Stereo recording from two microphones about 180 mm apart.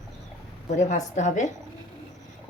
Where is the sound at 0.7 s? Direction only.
40° left (ahead or behind).